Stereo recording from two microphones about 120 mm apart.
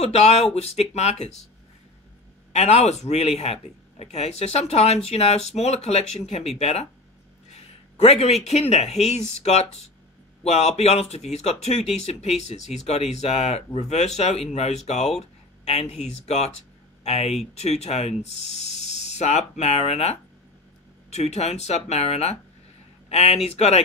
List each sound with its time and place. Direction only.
0.0 s speech: 65° left (ahead or behind)
2.5 s speech: 65° left (ahead or behind)